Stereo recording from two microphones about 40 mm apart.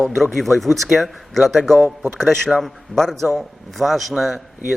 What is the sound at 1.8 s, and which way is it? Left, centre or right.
Speech, right.